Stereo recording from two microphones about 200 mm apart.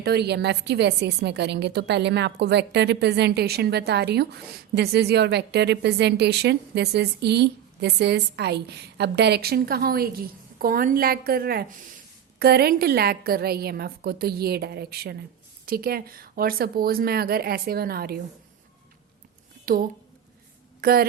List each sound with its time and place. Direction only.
0.0 s a woman's voice: 55° right (ahead or behind)
19.6 s a woman's voice: 45° right (ahead or behind)